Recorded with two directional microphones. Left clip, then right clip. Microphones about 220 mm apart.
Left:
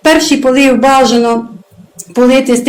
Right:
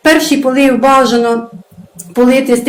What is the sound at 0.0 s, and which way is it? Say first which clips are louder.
A woman's voice: left 1 dB; 20° left (ahead or behind).